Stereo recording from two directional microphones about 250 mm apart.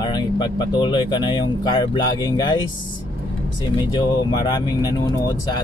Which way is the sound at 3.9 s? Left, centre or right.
Centre.